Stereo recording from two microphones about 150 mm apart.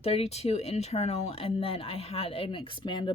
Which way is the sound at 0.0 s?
45° left (ahead or behind).